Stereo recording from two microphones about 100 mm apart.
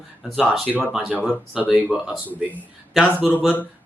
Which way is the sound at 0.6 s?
15° left (ahead or behind).